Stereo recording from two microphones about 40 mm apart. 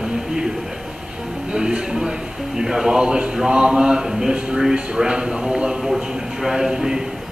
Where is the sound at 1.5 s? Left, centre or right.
Centre.